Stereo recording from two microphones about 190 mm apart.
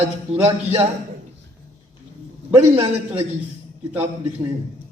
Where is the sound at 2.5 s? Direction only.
30° right (ahead or behind).